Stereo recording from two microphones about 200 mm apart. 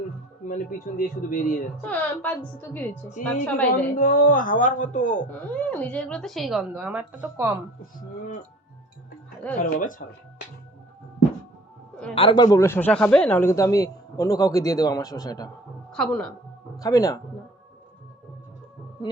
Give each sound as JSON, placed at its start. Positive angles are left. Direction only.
{"t": 0.4, "sound": "speech", "side_deg": 40}
{"t": 1.8, "sound": "speech", "side_deg": 10}
{"t": 3.9, "sound": "speech", "side_deg": 40}
{"t": 5.3, "sound": "a woman's voice", "side_deg": 5}
{"t": 9.6, "sound": "speech", "side_deg": 40}
{"t": 12.1, "sound": "speech", "side_deg": 25}
{"t": 15.9, "sound": "a woman's voice", "side_deg": 5}
{"t": 16.7, "sound": "a man's voice", "side_deg": 15}